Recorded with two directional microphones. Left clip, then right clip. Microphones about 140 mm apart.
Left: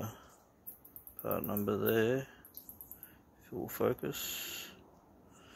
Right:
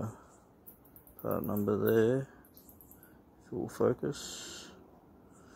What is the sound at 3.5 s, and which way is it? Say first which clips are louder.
Speech: right 3 dB; 25° right (ahead or behind).